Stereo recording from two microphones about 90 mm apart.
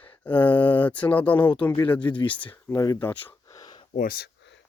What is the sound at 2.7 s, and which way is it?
Speech, 40° left (ahead or behind).